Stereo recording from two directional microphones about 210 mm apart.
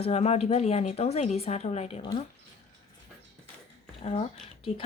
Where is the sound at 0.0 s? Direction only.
30° left (ahead or behind).